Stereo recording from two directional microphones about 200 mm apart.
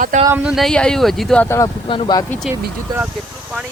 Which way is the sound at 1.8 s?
25° left (ahead or behind).